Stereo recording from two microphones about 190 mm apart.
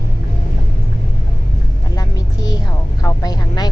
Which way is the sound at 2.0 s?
20° left (ahead or behind).